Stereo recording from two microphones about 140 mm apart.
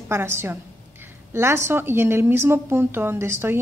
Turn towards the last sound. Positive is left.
turn(degrees=-15)  # may be behind; listen again after turning